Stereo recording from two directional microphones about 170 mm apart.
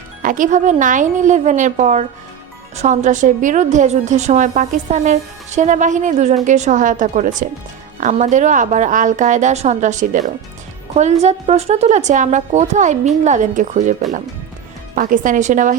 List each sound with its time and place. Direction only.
0.2 s a woman's voice: 50° right (ahead or behind)
14.9 s a woman's voice: 50° right (ahead or behind)